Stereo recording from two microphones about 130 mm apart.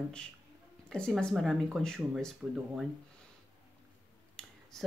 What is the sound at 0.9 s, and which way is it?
Speech, 5° left (ahead or behind).